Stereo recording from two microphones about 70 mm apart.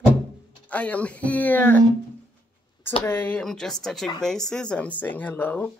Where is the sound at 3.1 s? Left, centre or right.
Left.